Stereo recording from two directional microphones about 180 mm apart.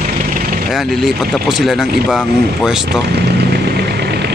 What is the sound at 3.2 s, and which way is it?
Vehicle, 65° right (ahead or behind).